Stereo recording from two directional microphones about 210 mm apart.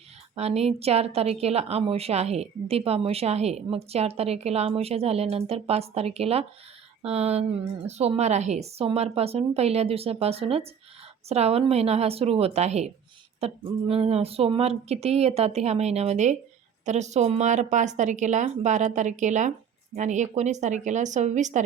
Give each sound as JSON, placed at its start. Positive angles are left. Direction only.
{"t": 0.3, "sound": "a woman's voice", "side_deg": -30}